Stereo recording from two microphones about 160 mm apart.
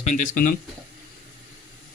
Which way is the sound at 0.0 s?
50° left (ahead or behind).